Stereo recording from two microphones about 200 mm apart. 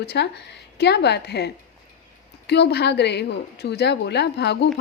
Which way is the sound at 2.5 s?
55° left (ahead or behind).